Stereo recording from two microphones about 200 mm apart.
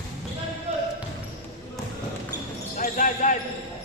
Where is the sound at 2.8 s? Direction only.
40° left (ahead or behind).